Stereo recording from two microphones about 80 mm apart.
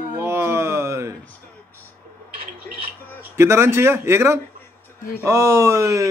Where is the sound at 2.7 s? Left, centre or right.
Left.